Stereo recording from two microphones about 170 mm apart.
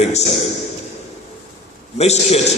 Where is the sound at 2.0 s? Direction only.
40° left (ahead or behind).